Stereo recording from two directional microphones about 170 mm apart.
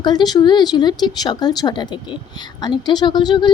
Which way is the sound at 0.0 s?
25° left (ahead or behind).